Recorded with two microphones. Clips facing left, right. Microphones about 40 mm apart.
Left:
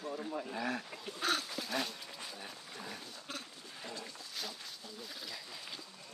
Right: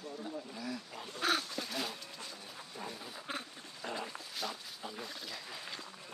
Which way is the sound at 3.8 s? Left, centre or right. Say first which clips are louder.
Right 6 dB; right.